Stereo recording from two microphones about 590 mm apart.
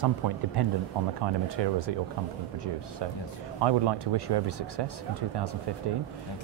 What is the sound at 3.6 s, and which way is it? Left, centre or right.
Speech, right.